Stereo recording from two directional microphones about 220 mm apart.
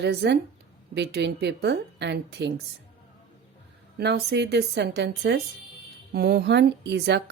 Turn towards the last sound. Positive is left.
turn(degrees=-50)  # may be behind; listen again after turning